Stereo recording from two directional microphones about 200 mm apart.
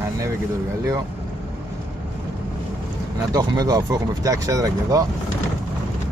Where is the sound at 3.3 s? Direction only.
20° right (ahead or behind).